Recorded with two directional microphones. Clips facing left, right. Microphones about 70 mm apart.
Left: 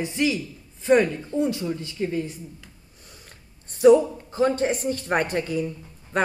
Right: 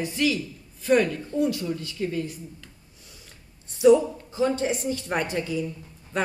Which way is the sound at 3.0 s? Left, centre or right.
Left.